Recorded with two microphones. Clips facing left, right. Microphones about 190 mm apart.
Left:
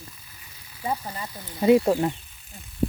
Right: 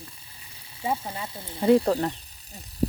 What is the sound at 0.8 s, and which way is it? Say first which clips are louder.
Speech: right 1 dB; 5° right (ahead or behind).